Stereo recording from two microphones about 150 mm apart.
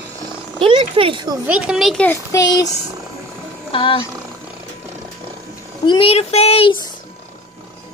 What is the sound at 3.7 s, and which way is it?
Speech, 35° left (ahead or behind).